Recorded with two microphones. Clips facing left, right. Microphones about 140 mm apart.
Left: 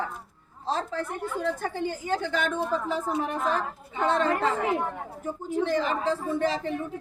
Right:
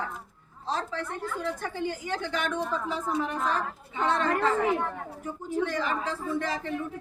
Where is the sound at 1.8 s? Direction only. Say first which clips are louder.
Left 3 dB; 45° left (ahead or behind).